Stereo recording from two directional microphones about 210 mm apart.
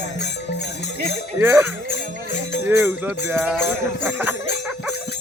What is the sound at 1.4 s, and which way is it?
Music, 10° right (ahead or behind).